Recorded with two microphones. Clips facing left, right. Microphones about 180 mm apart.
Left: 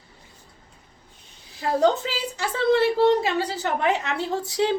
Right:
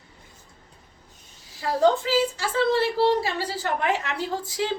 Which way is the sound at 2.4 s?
20° left (ahead or behind).